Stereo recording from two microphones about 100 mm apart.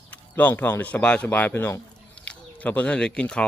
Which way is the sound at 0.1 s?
15° left (ahead or behind).